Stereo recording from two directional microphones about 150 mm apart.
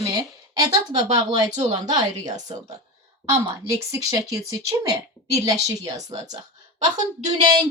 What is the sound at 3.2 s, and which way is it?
A woman's voice, 20° right (ahead or behind).